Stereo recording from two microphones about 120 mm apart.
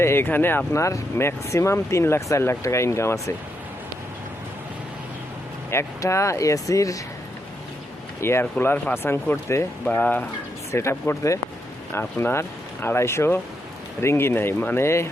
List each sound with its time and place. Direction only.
0.0 s speech: 20° left (ahead or behind)
5.7 s speech: 25° left (ahead or behind)
8.2 s speech: 20° left (ahead or behind)